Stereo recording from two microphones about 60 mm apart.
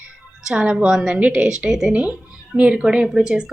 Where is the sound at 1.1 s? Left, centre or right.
Centre.